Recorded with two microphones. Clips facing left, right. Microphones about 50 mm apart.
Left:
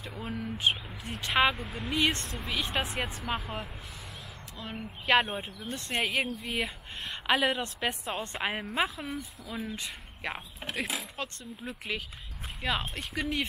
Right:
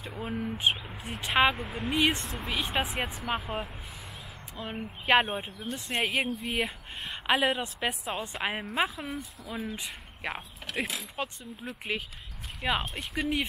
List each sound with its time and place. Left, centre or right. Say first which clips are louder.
0.0 s a woman's voice: right 3 dB; centre
11.2 s speech: right 3 dB; centre
11.6 s a woman's voice: right 2 dB; centre